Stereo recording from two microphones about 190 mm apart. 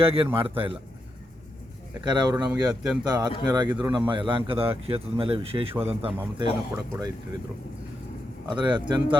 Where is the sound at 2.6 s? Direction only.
5° right (ahead or behind).